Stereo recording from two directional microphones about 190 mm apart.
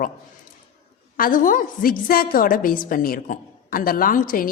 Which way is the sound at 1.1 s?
45° left (ahead or behind).